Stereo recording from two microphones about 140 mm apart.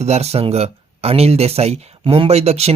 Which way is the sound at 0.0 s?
50° right (ahead or behind).